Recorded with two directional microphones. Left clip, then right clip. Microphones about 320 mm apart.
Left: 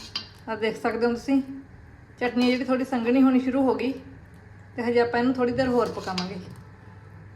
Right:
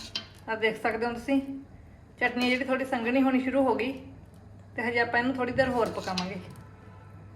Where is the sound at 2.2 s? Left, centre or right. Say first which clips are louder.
Left 2 dB; left.